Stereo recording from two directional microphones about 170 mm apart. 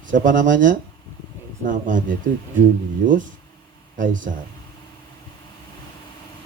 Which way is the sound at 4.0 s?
50° right (ahead or behind).